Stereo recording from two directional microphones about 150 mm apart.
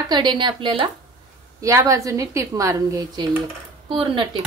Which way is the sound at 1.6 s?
20° right (ahead or behind).